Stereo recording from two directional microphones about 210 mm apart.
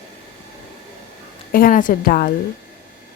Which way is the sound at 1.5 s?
40° left (ahead or behind).